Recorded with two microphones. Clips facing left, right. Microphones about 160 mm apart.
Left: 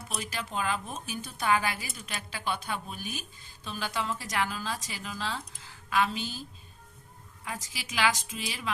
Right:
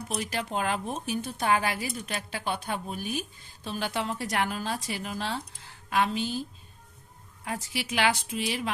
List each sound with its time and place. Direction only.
0.1 s speech: 60° right (ahead or behind)
7.7 s speech: 60° right (ahead or behind)